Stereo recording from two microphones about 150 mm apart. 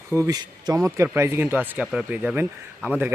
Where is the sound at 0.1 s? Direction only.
15° right (ahead or behind).